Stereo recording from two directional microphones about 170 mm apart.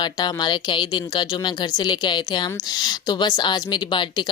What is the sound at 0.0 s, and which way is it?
Speech, 25° left (ahead or behind).